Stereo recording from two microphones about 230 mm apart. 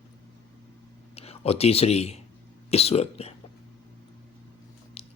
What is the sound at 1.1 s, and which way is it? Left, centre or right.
Speech, left.